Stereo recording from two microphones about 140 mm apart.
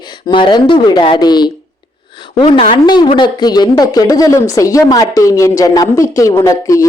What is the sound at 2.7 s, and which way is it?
Speech, 35° left (ahead or behind).